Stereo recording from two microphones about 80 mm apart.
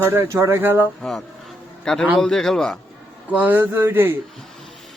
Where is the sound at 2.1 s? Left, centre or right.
Centre.